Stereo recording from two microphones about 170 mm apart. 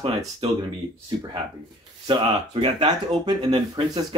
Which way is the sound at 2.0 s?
25° right (ahead or behind).